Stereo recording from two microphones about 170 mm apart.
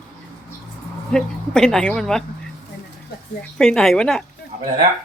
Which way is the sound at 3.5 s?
5° left (ahead or behind).